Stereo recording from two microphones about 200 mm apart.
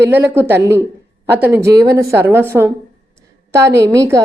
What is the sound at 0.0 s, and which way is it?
A woman's voice, 10° right (ahead or behind).